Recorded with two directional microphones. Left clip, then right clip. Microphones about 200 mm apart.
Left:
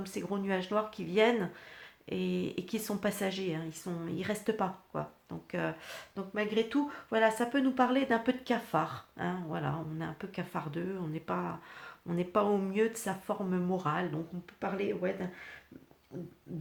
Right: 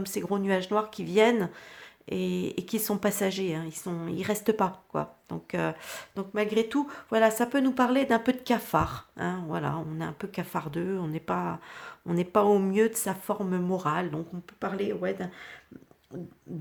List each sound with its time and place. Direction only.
0.0 s speech: 30° right (ahead or behind)